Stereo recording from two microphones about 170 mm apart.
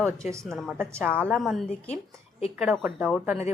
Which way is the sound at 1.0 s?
5° left (ahead or behind).